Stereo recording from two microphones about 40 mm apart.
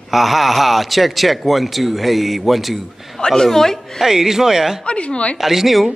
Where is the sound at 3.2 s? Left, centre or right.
Centre.